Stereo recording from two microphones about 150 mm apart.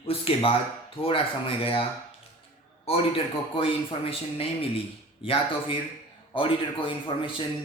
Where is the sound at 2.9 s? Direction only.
40° left (ahead or behind).